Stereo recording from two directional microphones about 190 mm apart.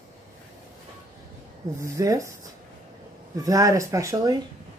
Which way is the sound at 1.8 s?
15° right (ahead or behind).